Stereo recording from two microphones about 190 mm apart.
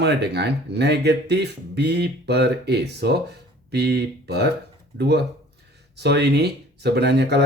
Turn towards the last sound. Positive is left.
turn(degrees=-60)  # may be behind; listen again after turning